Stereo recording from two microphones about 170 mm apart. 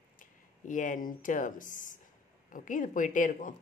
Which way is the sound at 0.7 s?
50° left (ahead or behind).